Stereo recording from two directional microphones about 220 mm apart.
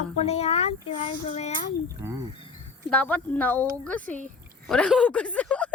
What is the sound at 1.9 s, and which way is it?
Speech, 15° right (ahead or behind).